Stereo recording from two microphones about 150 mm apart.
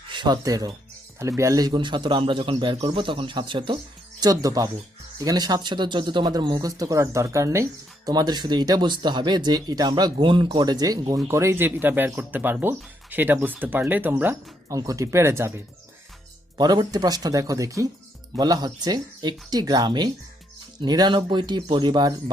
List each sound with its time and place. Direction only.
0.1 s speech: 30° right (ahead or behind)